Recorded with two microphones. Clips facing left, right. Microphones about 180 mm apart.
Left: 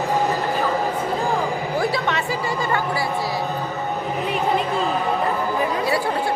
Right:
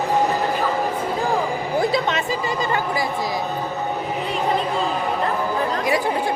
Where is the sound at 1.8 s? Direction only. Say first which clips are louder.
Right 3 dB; 20° right (ahead or behind).